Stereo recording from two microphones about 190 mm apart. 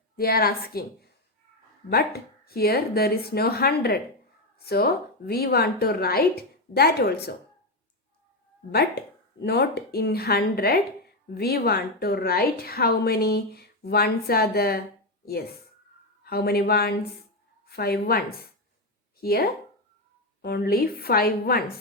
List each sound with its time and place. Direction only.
0.2 s a woman's voice: 55° left (ahead or behind)
1.9 s speech: 55° left (ahead or behind)
9.4 s a woman's voice: 60° left (ahead or behind)